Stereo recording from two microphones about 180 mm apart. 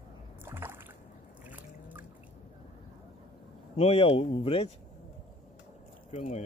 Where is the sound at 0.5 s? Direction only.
10° right (ahead or behind).